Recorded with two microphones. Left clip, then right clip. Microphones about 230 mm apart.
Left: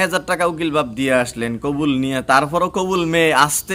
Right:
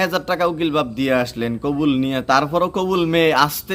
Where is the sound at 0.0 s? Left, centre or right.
Centre.